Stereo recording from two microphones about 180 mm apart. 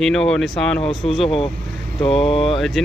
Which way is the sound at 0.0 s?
Centre (ahead or behind).